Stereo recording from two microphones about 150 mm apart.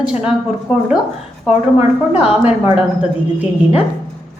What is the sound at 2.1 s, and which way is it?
Speech, 10° right (ahead or behind).